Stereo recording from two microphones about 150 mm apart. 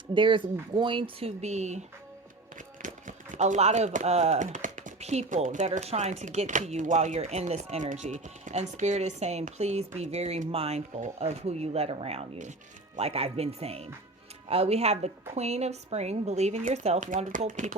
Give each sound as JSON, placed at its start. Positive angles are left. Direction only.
{"t": 0.1, "sound": "speech", "side_deg": -35}
{"t": 2.8, "sound": "speech", "side_deg": -55}